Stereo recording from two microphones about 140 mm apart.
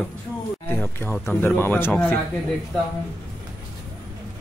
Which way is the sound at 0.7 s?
15° left (ahead or behind).